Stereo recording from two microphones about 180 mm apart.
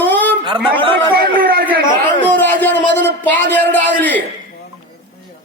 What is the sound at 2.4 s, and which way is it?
A man's voice, 10° left (ahead or behind).